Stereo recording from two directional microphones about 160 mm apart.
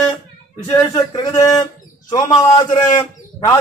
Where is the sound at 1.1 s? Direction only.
25° left (ahead or behind).